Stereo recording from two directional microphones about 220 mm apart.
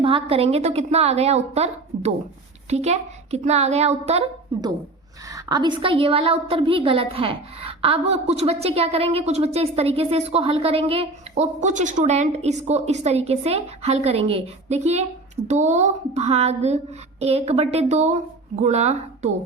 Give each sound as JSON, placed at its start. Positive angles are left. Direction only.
{"t": 0.0, "sound": "a woman's voice", "side_deg": -25}